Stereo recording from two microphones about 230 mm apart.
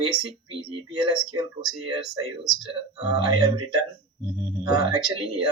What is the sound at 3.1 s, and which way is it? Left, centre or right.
Speech, centre.